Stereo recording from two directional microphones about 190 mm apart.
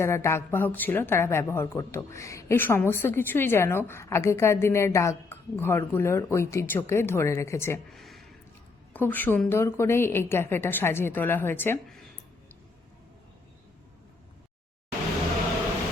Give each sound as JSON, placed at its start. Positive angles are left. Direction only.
{"t": 0.0, "sound": "a woman's voice", "side_deg": 15}
{"t": 7.9, "sound": "a sound", "side_deg": 0}
{"t": 8.9, "sound": "a woman's voice", "side_deg": 10}